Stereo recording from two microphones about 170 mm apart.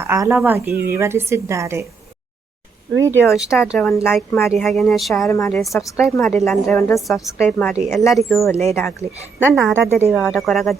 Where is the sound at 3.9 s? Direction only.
10° left (ahead or behind).